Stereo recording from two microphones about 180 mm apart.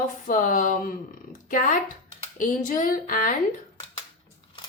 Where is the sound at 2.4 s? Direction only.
45° left (ahead or behind).